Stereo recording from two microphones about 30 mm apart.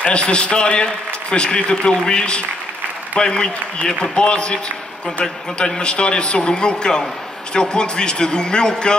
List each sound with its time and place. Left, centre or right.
0.0 s a man's voice: left
5.8 s a man's voice: left